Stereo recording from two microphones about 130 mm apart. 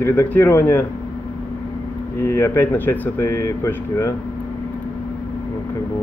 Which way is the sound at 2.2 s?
20° left (ahead or behind).